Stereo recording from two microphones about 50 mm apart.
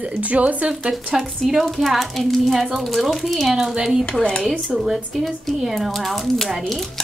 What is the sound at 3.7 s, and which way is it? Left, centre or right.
Speech, centre.